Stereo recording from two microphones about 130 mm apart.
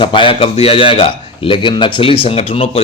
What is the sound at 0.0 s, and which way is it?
A man's voice, 40° left (ahead or behind).